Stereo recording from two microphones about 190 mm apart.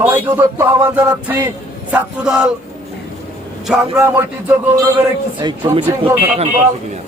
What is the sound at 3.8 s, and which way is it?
A man's voice, 15° right (ahead or behind).